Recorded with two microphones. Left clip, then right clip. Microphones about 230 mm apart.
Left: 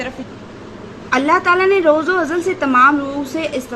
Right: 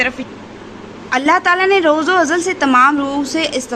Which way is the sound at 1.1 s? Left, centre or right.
Centre.